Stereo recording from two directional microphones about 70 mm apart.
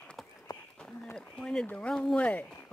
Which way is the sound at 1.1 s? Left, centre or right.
Centre.